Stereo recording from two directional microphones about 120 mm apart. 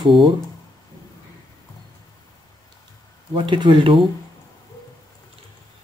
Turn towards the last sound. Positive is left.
turn(degrees=-45)  # may be behind; listen again after turning